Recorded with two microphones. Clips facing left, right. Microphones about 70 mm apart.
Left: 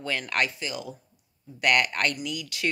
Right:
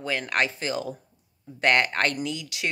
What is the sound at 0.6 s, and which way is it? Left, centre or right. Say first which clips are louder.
Speech: right 5 dB; right.